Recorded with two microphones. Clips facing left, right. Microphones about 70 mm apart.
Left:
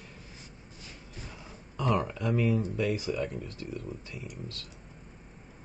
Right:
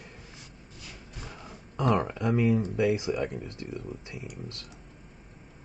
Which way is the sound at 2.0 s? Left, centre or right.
Right.